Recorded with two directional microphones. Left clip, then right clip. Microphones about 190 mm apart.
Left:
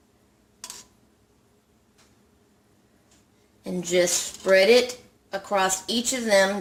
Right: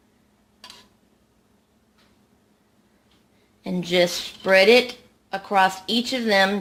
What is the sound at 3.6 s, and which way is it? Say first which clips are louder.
A woman's voice: right 2 dB; 35° right (ahead or behind).